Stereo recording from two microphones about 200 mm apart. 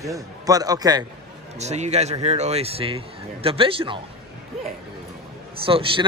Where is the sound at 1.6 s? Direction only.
35° right (ahead or behind).